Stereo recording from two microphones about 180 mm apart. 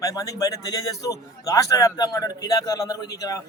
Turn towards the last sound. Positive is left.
turn(degrees=20)  # may be behind; listen again after turning